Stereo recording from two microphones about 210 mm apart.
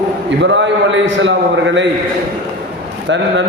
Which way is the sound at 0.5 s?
60° right (ahead or behind).